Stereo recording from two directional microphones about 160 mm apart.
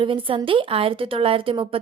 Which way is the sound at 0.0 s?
30° right (ahead or behind).